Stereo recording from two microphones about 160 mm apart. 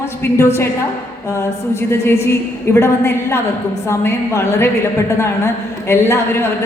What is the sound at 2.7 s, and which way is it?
A woman's voice, 15° left (ahead or behind).